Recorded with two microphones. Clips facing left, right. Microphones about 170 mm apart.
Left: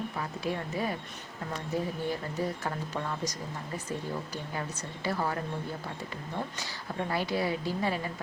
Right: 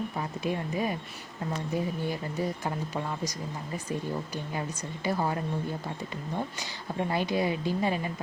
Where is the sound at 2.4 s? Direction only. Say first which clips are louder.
Right 1 dB; 15° right (ahead or behind).